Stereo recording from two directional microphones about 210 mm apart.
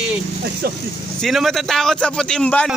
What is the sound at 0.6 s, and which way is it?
Speech, 45° right (ahead or behind).